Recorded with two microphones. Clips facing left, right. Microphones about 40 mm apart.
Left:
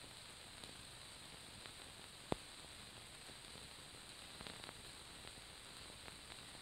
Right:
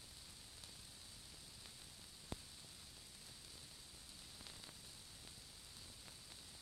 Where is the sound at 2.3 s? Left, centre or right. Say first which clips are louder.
Left 9 dB; left.